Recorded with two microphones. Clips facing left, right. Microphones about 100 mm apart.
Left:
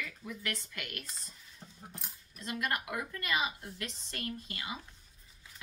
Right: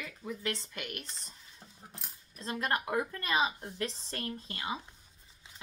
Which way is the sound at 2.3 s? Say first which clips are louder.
Right 2 dB; 30° right (ahead or behind).